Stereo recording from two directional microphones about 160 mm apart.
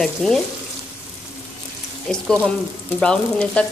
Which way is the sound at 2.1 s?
5° left (ahead or behind).